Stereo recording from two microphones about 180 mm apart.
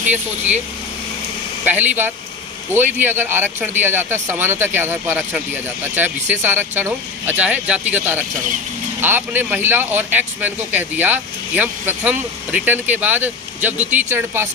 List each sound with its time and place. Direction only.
1.6 s speech: 10° right (ahead or behind)